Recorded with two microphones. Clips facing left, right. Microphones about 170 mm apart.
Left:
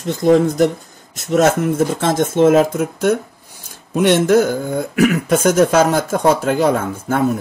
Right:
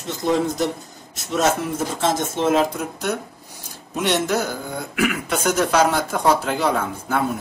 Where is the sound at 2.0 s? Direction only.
55° left (ahead or behind).